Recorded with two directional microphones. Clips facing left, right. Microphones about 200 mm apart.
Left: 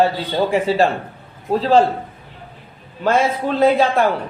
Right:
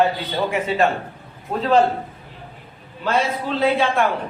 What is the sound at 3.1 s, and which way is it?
Speech, 45° left (ahead or behind).